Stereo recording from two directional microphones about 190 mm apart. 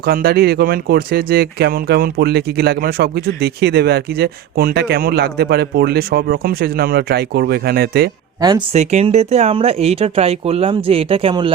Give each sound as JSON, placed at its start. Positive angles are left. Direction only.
{"t": 0.0, "sound": "speech", "side_deg": -55}
{"t": 8.4, "sound": "speech", "side_deg": -20}
{"t": 8.7, "sound": "speech", "side_deg": -35}